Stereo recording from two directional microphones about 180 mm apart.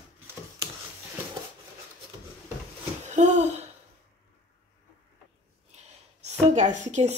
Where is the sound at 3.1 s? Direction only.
40° right (ahead or behind).